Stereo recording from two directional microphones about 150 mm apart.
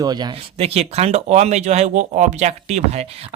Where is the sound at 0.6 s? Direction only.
45° right (ahead or behind).